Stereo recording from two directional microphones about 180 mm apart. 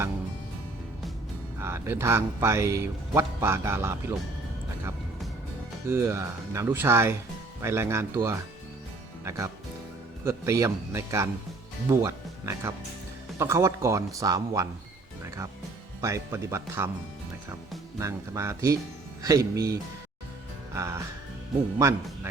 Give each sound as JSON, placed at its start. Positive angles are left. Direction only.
{"t": 1.5, "sound": "a man's voice", "side_deg": -15}
{"t": 5.9, "sound": "a man's voice", "side_deg": -15}
{"t": 10.2, "sound": "a man's voice", "side_deg": -15}
{"t": 16.0, "sound": "a man's voice", "side_deg": -15}
{"t": 18.0, "sound": "a man's voice", "side_deg": -15}